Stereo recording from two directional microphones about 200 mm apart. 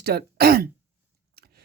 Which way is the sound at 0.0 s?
50° right (ahead or behind).